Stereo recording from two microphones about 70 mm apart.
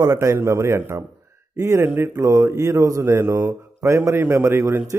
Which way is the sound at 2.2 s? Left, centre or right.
Right.